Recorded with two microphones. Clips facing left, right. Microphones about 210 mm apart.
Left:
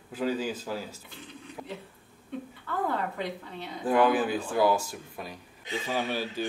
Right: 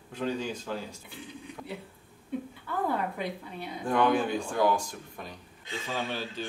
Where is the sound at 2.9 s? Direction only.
10° right (ahead or behind).